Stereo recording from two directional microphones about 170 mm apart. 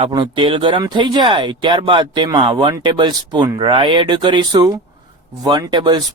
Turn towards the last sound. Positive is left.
turn(degrees=-25)  # may be behind; listen again after turning